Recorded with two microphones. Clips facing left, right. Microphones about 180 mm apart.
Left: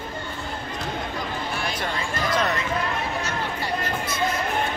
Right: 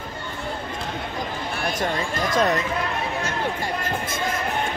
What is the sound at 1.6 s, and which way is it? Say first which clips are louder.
Speech: right 3 dB; 45° right (ahead or behind).